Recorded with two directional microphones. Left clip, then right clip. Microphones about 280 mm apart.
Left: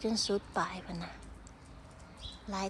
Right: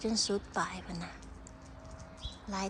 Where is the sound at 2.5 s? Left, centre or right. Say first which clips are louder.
Even; centre.